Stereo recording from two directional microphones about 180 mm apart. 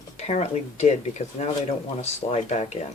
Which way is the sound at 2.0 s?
40° left (ahead or behind).